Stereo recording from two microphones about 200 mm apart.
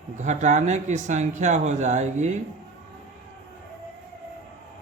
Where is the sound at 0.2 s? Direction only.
35° right (ahead or behind).